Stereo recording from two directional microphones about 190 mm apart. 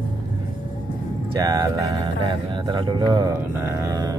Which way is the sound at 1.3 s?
20° right (ahead or behind).